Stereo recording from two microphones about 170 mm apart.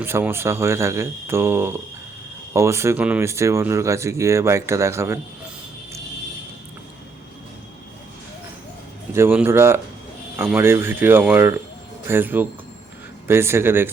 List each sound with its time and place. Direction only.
0.0 s speech: 15° right (ahead or behind)
9.1 s speech: 10° right (ahead or behind)